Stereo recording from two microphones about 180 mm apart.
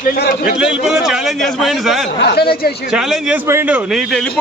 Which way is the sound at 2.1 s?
65° left (ahead or behind).